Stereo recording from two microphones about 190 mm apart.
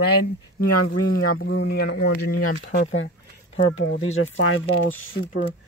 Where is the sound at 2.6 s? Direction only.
80° left.